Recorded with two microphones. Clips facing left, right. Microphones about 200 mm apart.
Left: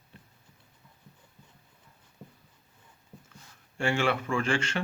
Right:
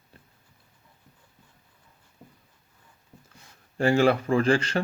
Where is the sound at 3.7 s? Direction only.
35° right (ahead or behind).